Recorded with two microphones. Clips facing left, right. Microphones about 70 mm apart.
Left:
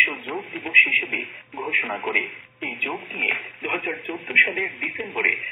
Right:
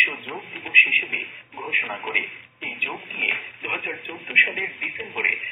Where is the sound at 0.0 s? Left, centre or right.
Centre.